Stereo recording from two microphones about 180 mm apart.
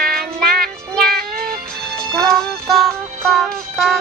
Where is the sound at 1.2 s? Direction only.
55° right (ahead or behind).